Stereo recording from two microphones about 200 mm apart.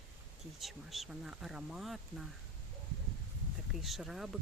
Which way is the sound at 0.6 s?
Centre (ahead or behind).